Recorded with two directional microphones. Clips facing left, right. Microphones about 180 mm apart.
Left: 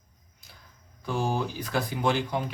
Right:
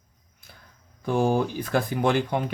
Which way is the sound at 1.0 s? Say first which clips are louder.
Right 6 dB; 55° right (ahead or behind).